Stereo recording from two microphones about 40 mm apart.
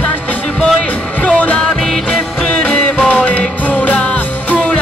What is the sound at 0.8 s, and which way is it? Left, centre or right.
Speech, left.